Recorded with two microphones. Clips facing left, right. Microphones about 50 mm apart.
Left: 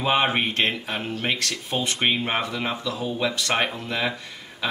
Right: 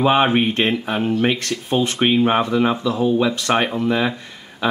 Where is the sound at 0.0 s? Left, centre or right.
Centre.